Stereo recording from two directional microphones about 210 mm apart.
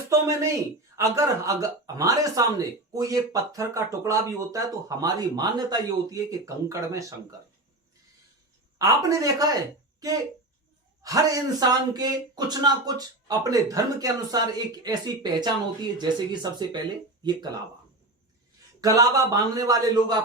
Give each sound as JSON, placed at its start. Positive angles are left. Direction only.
{"t": 0.1, "sound": "speech", "side_deg": -15}
{"t": 8.8, "sound": "speech", "side_deg": -15}
{"t": 11.0, "sound": "speech", "side_deg": -15}
{"t": 18.8, "sound": "speech", "side_deg": -15}